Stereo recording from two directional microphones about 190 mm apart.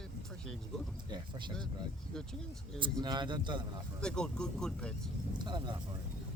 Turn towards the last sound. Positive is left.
turn(degrees=-25)  # may be behind; listen again after turning